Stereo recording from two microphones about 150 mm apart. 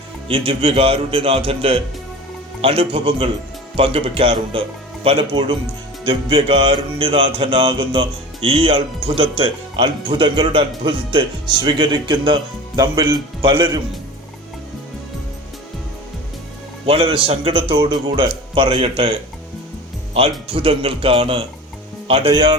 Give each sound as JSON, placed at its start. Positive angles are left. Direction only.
{"t": 0.3, "sound": "music", "side_deg": -35}
{"t": 16.8, "sound": "music", "side_deg": -40}
{"t": 20.5, "sound": "music", "side_deg": -40}